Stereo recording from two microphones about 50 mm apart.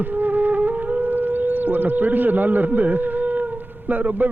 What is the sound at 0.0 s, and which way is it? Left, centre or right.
Music, right.